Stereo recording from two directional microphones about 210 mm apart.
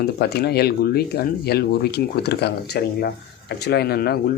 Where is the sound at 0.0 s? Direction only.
50° left (ahead or behind).